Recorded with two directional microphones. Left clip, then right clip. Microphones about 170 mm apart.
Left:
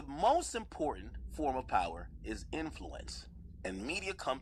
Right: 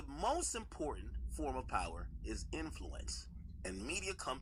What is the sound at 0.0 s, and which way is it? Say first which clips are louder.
Chopping: left 8 dB; 25° left (ahead or behind).